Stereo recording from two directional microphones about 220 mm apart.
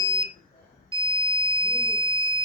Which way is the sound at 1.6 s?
15° left (ahead or behind).